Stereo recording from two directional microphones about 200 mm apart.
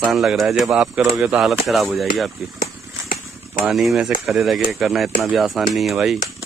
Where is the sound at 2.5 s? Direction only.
45° left (ahead or behind).